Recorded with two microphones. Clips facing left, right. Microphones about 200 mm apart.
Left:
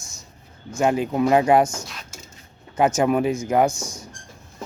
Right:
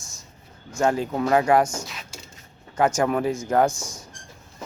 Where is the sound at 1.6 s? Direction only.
Centre (ahead or behind).